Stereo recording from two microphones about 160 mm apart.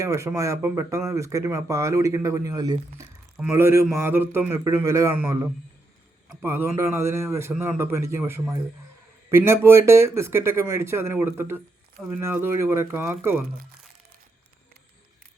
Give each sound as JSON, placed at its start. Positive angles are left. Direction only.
{"t": 0.0, "sound": "speech", "side_deg": -20}
{"t": 3.3, "sound": "speech", "side_deg": -10}